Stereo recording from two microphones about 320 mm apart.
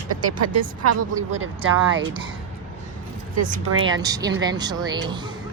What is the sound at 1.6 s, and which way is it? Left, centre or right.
Speech, right.